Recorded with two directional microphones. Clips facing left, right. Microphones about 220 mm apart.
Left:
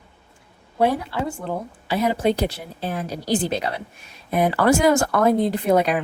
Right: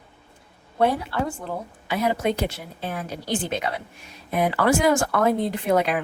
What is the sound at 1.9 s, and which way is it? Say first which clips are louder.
A woman's voice: left 3 dB; 30° left (ahead or behind).